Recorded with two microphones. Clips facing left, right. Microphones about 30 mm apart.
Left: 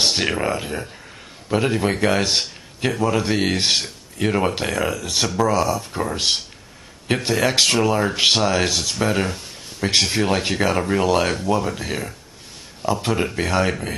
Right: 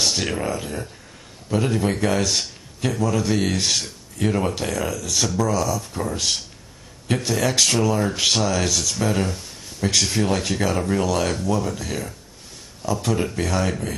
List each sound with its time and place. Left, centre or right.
0.0 s speech: left